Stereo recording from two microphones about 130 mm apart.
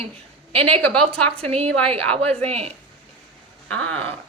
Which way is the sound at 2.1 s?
50° right (ahead or behind).